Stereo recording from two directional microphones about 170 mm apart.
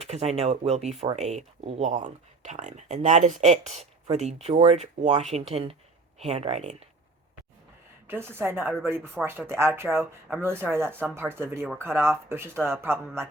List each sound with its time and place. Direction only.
0.0 s speech: 40° right (ahead or behind)
8.0 s a woman's voice: 15° right (ahead or behind)